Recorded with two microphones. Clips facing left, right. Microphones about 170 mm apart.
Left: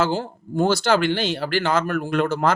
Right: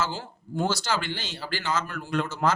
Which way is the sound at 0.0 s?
60° left (ahead or behind).